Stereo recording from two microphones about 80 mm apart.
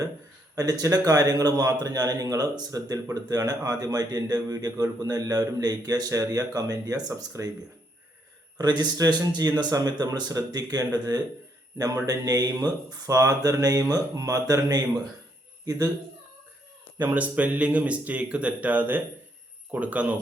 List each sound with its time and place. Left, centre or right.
0.5 s a man's voice: right
8.5 s a man's voice: right
17.0 s speech: right